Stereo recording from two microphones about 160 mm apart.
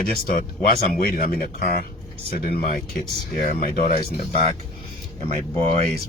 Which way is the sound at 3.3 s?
60° left (ahead or behind).